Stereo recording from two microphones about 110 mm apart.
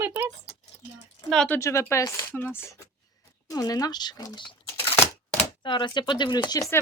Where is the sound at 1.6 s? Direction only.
25° left (ahead or behind).